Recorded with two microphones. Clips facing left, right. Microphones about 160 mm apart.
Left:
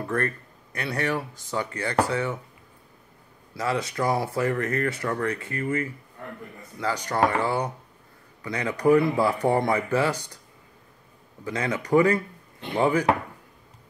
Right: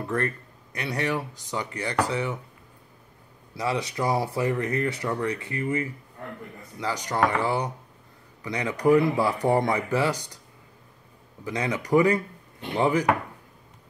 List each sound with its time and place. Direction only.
0.0 s speech: 20° right (ahead or behind)
3.5 s speech: 20° right (ahead or behind)
11.4 s speech: 20° right (ahead or behind)